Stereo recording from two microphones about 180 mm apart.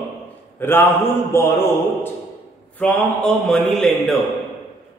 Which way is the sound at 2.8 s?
5° left (ahead or behind).